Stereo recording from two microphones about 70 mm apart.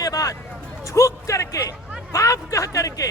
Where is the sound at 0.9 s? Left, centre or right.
Left.